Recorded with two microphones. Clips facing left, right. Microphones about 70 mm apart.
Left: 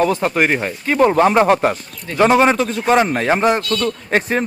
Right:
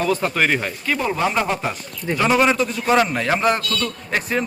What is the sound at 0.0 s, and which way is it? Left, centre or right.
Speech, left.